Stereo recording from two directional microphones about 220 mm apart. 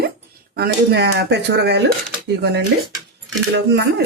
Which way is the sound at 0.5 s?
45° right (ahead or behind).